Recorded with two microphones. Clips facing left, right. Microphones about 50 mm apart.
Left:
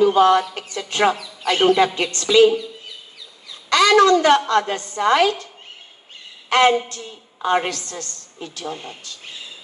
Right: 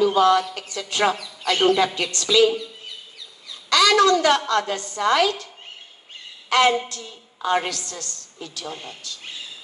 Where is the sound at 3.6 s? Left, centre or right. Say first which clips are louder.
Left 3 dB; left.